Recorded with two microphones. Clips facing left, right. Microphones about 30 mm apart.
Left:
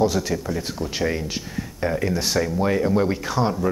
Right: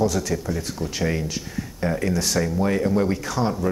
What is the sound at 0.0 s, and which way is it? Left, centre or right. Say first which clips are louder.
Speech: left 2 dB; left.